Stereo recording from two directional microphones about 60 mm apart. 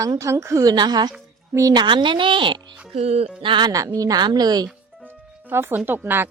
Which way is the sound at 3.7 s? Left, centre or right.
Right.